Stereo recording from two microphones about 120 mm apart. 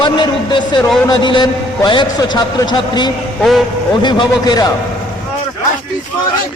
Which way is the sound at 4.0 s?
40° left (ahead or behind).